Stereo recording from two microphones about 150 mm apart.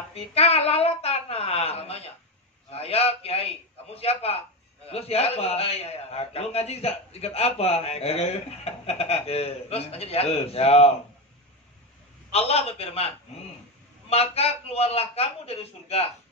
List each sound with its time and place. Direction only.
0.1 s a man's voice: 40° left (ahead or behind)
12.3 s a man's voice: 45° left (ahead or behind)